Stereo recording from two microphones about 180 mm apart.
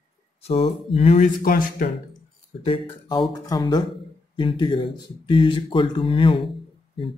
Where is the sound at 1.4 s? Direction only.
50° left (ahead or behind).